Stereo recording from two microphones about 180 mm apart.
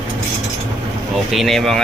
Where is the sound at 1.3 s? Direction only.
Centre (ahead or behind).